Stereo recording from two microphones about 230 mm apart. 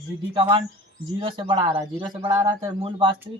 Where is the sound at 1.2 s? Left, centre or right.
Right.